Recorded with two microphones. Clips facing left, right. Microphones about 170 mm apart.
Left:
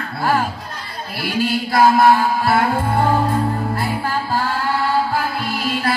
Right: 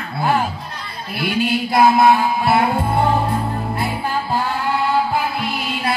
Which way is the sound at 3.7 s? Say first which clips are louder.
Even; 20° right (ahead or behind).